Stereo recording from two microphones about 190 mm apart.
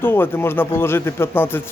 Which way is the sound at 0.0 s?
10° left (ahead or behind).